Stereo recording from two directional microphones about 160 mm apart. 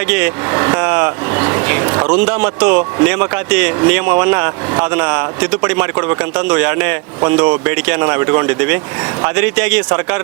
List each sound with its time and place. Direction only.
0.1 s a man's voice: 10° right (ahead or behind)